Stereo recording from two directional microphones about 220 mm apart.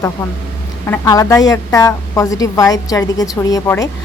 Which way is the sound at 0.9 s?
15° left (ahead or behind).